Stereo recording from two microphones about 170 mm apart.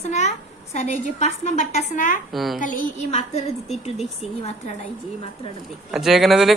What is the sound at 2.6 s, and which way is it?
Speech, 50° left (ahead or behind).